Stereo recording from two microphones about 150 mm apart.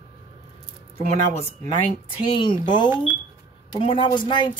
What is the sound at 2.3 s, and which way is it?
Speech, 30° left (ahead or behind).